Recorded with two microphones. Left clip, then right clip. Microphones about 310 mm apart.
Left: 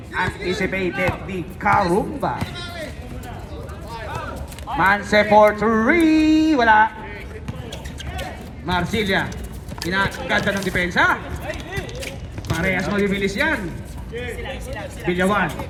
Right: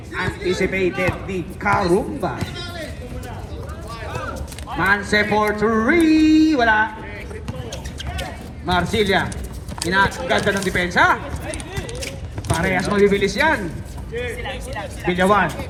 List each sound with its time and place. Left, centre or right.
0.1 s speech: left
4.7 s speech: left
8.6 s speech: centre
12.6 s a man's voice: centre
14.2 s vehicle: centre
15.0 s a man's voice: centre